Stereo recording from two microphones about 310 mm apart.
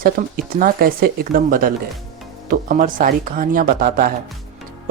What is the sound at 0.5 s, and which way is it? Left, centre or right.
Speech, right.